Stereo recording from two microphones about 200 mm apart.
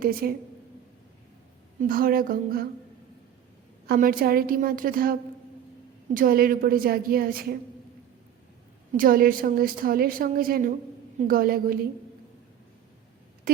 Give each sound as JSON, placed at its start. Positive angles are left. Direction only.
{"t": 0.0, "sound": "a woman's voice", "side_deg": -50}
{"t": 1.8, "sound": "a woman's voice", "side_deg": -45}
{"t": 3.8, "sound": "a woman's voice", "side_deg": -45}
{"t": 6.1, "sound": "a woman's voice", "side_deg": -45}
{"t": 8.9, "sound": "a woman's voice", "side_deg": -45}